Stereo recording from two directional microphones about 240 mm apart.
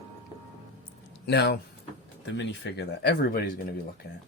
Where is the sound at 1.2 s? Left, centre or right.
Left.